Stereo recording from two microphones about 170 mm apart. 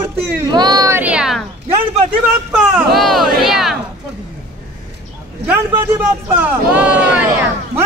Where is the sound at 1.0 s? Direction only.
5° right (ahead or behind).